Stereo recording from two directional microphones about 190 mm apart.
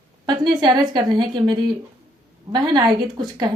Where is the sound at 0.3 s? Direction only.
25° right (ahead or behind).